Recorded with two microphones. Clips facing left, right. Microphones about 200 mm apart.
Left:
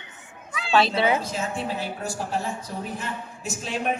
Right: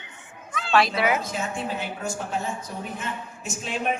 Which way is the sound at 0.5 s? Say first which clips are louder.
Even; 5° left (ahead or behind).